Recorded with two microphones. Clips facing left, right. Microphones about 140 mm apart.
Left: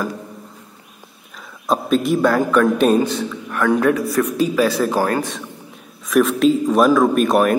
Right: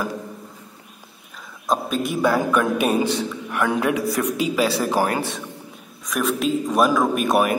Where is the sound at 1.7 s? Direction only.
Centre (ahead or behind).